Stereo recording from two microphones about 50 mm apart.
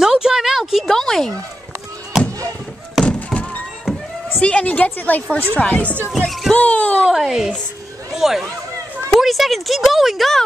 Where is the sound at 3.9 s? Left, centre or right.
Centre.